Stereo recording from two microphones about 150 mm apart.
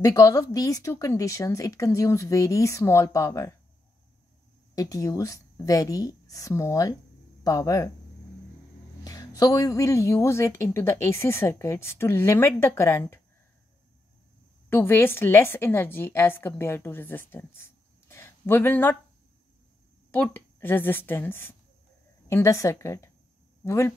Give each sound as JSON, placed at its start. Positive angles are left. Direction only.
{"t": 0.0, "sound": "speech", "side_deg": 20}
{"t": 4.7, "sound": "speech", "side_deg": 20}
{"t": 9.0, "sound": "a woman's voice", "side_deg": 25}
{"t": 14.7, "sound": "a woman's voice", "side_deg": 15}
{"t": 20.1, "sound": "a woman's voice", "side_deg": 15}